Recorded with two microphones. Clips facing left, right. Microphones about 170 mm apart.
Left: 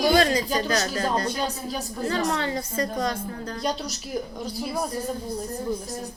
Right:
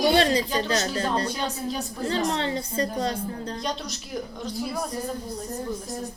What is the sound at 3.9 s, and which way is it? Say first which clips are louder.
A woman's voice: left 2 dB; 5° left (ahead or behind).